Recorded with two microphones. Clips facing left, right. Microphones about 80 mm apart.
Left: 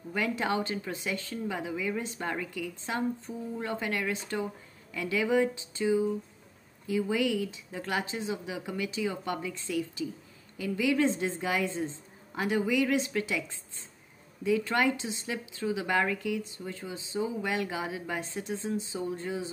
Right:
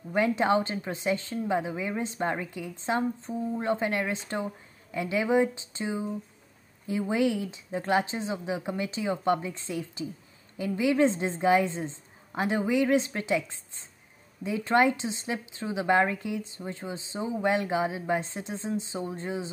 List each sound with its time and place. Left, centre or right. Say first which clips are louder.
0.1 s speech: right 6 dB; right